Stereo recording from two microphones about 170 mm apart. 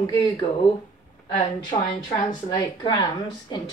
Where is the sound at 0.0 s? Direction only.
25° left (ahead or behind).